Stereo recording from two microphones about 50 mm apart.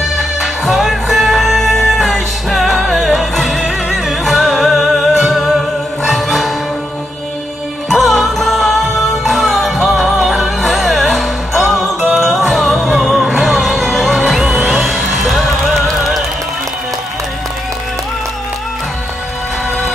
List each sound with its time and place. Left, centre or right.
0.2 s music: centre
7.9 s music: centre